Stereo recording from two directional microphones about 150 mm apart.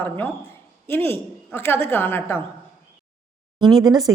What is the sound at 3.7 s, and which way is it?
Speech, 25° right (ahead or behind).